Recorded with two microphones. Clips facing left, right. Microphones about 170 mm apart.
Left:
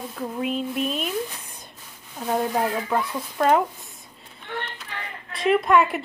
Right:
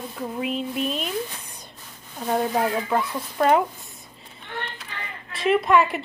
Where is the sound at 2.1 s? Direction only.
Centre (ahead or behind).